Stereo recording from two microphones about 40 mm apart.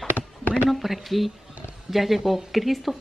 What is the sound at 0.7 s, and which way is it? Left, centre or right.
Speech, centre.